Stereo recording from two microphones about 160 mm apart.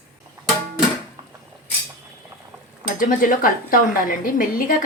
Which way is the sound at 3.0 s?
60° left (ahead or behind).